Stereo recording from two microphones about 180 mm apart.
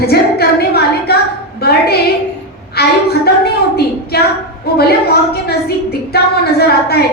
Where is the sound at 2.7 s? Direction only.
60° left (ahead or behind).